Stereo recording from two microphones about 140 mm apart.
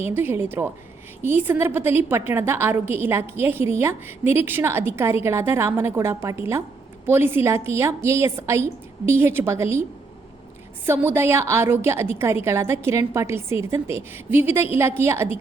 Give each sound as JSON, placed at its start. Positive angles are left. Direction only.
{"t": 0.0, "sound": "a woman's voice", "side_deg": -15}
{"t": 10.8, "sound": "a woman's voice", "side_deg": -15}